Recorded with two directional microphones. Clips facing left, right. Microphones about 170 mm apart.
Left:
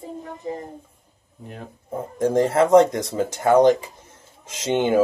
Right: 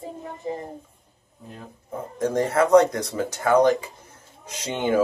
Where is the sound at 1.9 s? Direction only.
30° left (ahead or behind).